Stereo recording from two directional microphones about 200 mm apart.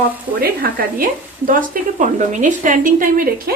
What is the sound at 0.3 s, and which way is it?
A woman's voice, 45° right (ahead or behind).